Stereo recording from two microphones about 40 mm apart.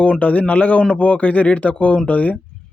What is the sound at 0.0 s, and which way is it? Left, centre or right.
Speech, left.